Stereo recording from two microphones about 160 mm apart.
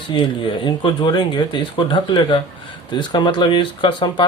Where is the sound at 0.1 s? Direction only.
30° left (ahead or behind).